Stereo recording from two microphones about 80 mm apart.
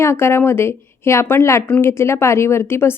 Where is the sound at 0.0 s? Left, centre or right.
Left.